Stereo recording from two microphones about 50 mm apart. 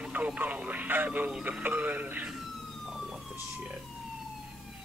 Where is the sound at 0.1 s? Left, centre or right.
Right.